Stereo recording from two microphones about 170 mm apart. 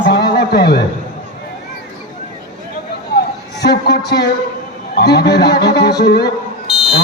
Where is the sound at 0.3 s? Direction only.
70° left (ahead or behind).